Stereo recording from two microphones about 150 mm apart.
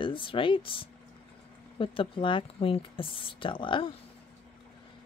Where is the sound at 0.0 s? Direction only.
35° left (ahead or behind).